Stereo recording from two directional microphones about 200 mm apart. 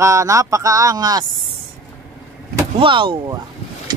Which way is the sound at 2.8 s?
25° right (ahead or behind).